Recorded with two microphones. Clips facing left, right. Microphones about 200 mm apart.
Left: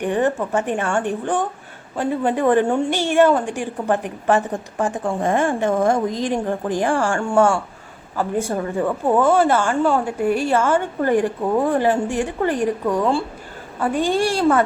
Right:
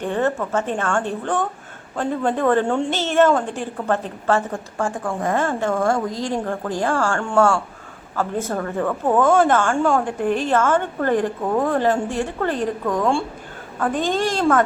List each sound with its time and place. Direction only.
0.0 s a woman's voice: 15° left (ahead or behind)